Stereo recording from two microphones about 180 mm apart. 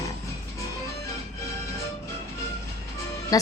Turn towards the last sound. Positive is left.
turn(degrees=20)  # may be behind; listen again after turning